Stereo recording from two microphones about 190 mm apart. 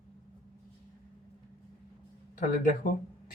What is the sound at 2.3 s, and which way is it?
Speech, 45° left (ahead or behind).